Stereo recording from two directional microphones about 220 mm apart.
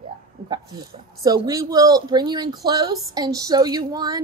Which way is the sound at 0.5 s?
15° right (ahead or behind).